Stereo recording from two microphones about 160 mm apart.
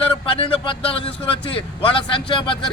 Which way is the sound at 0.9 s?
35° left (ahead or behind).